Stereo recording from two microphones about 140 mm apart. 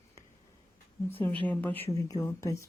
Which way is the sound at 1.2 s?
10° left (ahead or behind).